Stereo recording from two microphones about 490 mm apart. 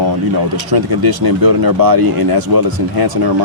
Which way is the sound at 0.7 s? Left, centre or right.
Right.